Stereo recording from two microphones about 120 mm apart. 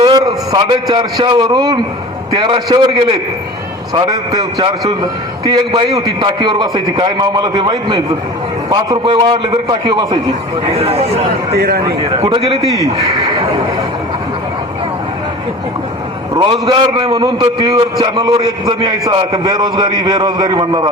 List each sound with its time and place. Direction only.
0.0 s a man's voice: 35° right (ahead or behind)
10.7 s speech: 55° right (ahead or behind)
12.0 s a man's voice: 45° right (ahead or behind)
16.3 s a man's voice: 40° right (ahead or behind)
17.2 s a man's voice: 35° right (ahead or behind)